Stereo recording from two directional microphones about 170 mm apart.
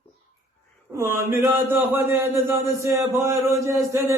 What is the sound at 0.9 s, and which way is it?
Music, 15° right (ahead or behind).